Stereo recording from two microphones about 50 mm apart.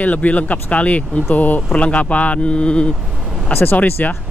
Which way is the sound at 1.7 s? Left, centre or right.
Left.